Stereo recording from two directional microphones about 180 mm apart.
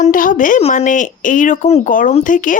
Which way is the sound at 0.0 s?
50° left (ahead or behind).